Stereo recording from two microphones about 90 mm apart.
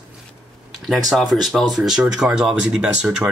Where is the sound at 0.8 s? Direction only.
Centre (ahead or behind).